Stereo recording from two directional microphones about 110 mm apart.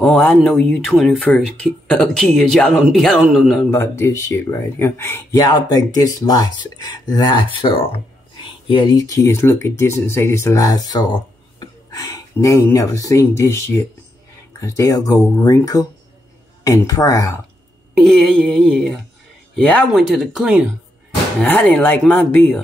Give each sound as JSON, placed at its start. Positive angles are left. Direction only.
{"t": 0.0, "sound": "speech", "side_deg": 10}
{"t": 3.7, "sound": "speech", "side_deg": 25}
{"t": 5.3, "sound": "speech", "side_deg": 35}
{"t": 8.9, "sound": "speech", "side_deg": 30}
{"t": 17.9, "sound": "speech", "side_deg": 0}
{"t": 19.9, "sound": "speech", "side_deg": 0}
{"t": 21.4, "sound": "speech", "side_deg": 15}